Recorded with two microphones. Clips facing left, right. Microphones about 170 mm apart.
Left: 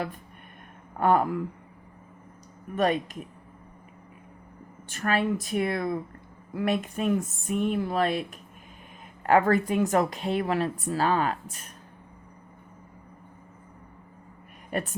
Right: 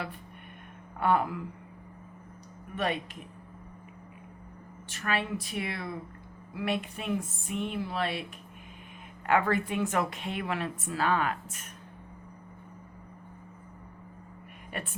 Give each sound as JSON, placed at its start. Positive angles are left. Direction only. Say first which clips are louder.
{"t": 0.9, "sound": "speech", "louder": "left 4 dB", "side_deg": 45}
{"t": 2.7, "sound": "speech", "louder": "left 7 dB", "side_deg": 45}
{"t": 4.9, "sound": "speech", "louder": "left 6 dB", "side_deg": 45}
{"t": 9.2, "sound": "a woman's voice", "louder": "left 5 dB", "side_deg": 40}
{"t": 14.7, "sound": "speech", "louder": "left 8 dB", "side_deg": 40}